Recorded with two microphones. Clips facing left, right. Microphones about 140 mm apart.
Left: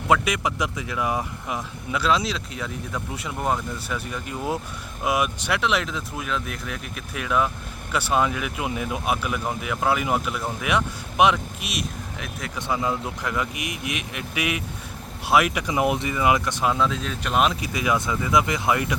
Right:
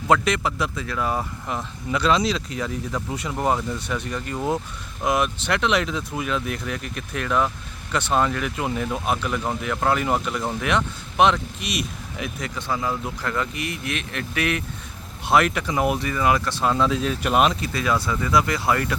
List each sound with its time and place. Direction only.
0.1 s speech: 10° left (ahead or behind)
12.5 s speech: 20° left (ahead or behind)
16.7 s speech: centre (ahead or behind)
17.6 s speech: 15° left (ahead or behind)